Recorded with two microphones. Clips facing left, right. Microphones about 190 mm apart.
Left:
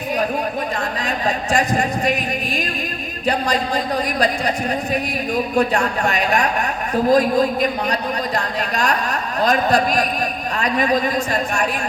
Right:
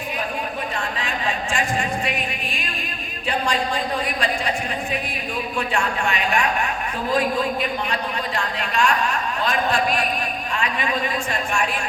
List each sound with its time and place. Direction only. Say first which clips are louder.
1.5 s speech: left 6 dB; 40° left (ahead or behind)
3.2 s a woman's voice: left 4 dB; 40° left (ahead or behind)
5.5 s a woman's voice: left 5 dB; 40° left (ahead or behind)